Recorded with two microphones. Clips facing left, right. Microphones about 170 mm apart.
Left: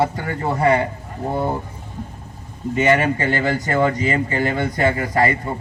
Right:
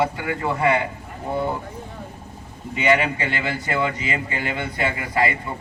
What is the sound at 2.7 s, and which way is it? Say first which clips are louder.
Speech: left 3 dB; 45° left (ahead or behind).